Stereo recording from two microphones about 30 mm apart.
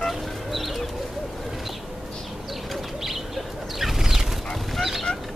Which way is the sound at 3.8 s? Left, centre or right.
Centre.